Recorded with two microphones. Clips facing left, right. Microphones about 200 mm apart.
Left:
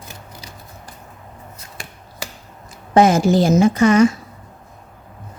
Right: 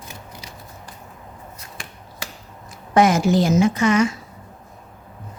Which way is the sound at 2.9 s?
30° left (ahead or behind).